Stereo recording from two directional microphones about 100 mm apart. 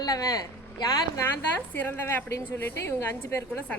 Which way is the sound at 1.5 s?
15° left (ahead or behind).